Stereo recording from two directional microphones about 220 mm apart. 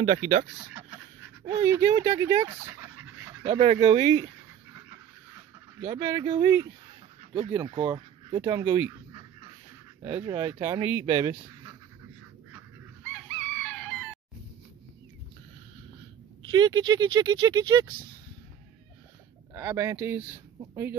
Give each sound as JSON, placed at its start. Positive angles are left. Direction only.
{"t": 0.1, "sound": "speech", "side_deg": -20}
{"t": 1.4, "sound": "speech", "side_deg": -15}
{"t": 3.4, "sound": "speech", "side_deg": -25}
{"t": 5.8, "sound": "speech", "side_deg": -10}
{"t": 10.0, "sound": "speech", "side_deg": -10}
{"t": 13.3, "sound": "chicken", "side_deg": 10}
{"t": 16.4, "sound": "speech", "side_deg": -20}
{"t": 19.5, "sound": "speech", "side_deg": -10}